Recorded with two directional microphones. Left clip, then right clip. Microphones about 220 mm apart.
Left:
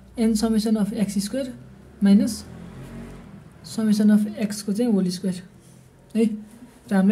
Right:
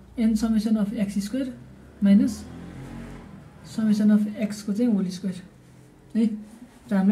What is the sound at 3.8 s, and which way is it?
Speech, 50° left (ahead or behind).